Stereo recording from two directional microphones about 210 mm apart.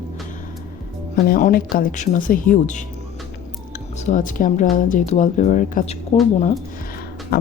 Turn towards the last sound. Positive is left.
turn(degrees=45)  # may be behind; listen again after turning